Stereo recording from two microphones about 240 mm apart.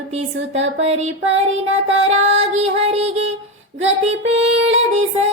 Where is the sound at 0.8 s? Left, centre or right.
Right.